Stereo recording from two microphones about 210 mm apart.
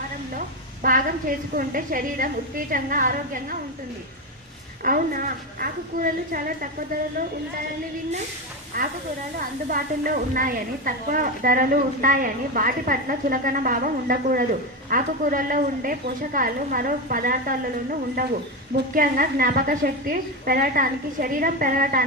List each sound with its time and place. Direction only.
0.3 s a sound: 40° right (ahead or behind)
1.5 s a woman's voice: 40° right (ahead or behind)
4.8 s a woman's voice: 40° right (ahead or behind)
8.7 s a woman's voice: 45° right (ahead or behind)
18.9 s a woman's voice: 45° right (ahead or behind)